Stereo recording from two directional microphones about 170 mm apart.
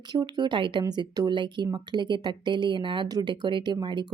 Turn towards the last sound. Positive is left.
turn(degrees=-25)  # may be behind; listen again after turning